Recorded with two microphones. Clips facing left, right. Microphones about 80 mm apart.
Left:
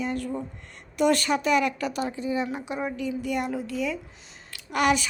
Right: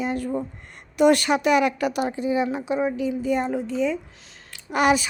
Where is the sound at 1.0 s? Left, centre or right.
Right.